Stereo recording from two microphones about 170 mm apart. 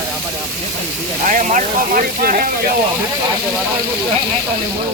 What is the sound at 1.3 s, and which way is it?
Speech, 50° right (ahead or behind).